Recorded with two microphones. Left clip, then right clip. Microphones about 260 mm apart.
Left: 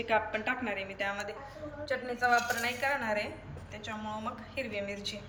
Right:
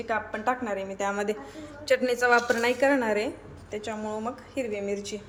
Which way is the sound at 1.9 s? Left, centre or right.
Right.